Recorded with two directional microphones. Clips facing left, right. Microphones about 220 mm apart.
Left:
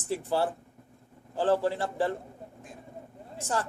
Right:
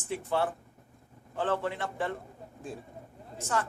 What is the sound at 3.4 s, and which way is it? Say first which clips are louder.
Speech: left 1 dB; 35° left (ahead or behind).